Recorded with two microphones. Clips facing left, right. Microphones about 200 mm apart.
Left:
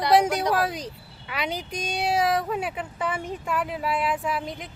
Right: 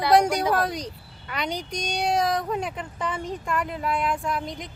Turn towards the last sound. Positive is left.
turn(degrees=5)  # may be behind; listen again after turning